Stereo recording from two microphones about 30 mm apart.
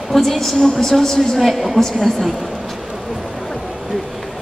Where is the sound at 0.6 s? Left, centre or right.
Centre.